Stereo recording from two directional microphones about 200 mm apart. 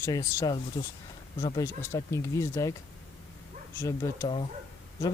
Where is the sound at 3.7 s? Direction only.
15° left (ahead or behind).